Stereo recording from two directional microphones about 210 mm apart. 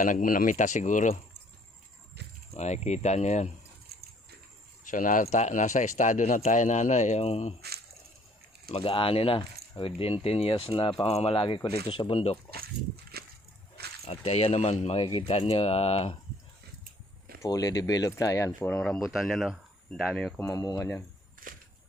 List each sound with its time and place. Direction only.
0.0 s speech: 40° left (ahead or behind)
2.5 s speech: 30° left (ahead or behind)
3.9 s a sound: 45° right (ahead or behind)
4.9 s speech: 40° left (ahead or behind)
8.7 s speech: 25° left (ahead or behind)
13.1 s wood: 50° right (ahead or behind)
14.1 s speech: 30° left (ahead or behind)
17.4 s speech: 15° left (ahead or behind)
21.4 s a sound: 40° right (ahead or behind)